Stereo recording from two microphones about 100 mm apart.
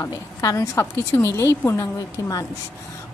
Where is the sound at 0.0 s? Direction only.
35° left (ahead or behind).